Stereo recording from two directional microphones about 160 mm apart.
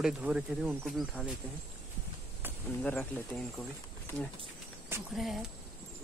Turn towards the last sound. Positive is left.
turn(degrees=0)  # may be behind; listen again after turning